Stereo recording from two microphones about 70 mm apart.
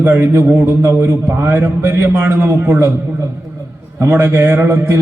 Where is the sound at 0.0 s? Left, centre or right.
Right.